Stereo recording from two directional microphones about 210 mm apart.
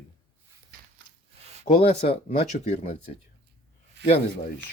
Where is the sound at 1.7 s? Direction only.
30° left (ahead or behind).